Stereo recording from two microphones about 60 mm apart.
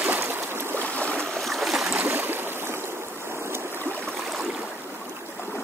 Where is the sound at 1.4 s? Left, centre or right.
Centre.